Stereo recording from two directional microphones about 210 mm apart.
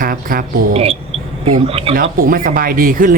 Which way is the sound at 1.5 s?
25° right (ahead or behind).